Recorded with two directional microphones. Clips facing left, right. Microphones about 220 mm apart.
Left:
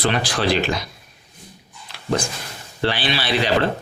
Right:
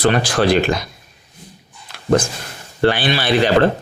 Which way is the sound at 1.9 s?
50° right (ahead or behind).